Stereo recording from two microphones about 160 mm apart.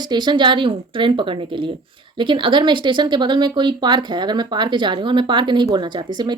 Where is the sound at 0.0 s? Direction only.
25° right (ahead or behind).